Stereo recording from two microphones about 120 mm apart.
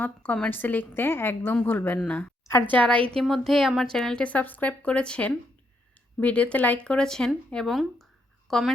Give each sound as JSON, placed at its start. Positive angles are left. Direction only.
{"t": 0.0, "sound": "a woman's voice", "side_deg": 10}